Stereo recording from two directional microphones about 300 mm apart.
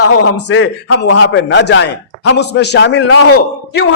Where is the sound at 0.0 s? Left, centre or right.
Left.